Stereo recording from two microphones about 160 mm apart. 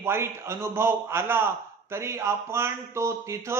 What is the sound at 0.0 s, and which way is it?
A man's voice, 15° right (ahead or behind).